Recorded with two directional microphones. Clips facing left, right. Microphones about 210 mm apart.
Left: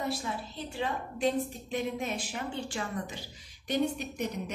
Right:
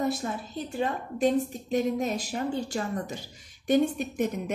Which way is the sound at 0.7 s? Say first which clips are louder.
Right 5 dB; 45° right (ahead or behind).